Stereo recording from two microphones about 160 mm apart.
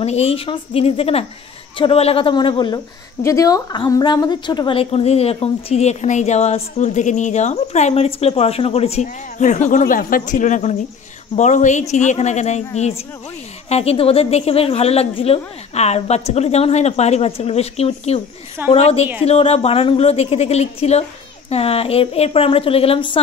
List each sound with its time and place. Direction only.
0.0 s a woman's voice: 40° left (ahead or behind)